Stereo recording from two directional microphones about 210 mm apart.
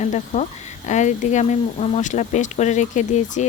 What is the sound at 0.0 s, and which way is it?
Speech, 35° left (ahead or behind).